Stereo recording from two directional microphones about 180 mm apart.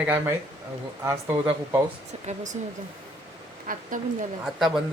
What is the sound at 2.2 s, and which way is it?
Speech, 40° right (ahead or behind).